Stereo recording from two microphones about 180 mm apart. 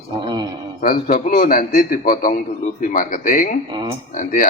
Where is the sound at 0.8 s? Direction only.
55° left (ahead or behind).